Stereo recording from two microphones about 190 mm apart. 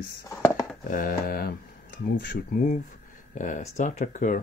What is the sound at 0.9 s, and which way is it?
Speech, 50° left (ahead or behind).